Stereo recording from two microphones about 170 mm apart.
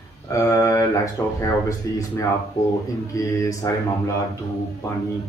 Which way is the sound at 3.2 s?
20° left (ahead or behind).